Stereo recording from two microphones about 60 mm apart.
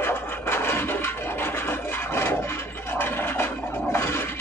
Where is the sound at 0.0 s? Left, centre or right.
Left.